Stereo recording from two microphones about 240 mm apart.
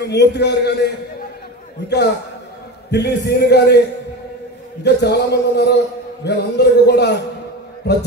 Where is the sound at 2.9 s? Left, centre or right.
Left.